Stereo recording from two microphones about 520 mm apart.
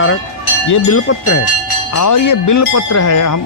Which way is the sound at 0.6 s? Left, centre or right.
Left.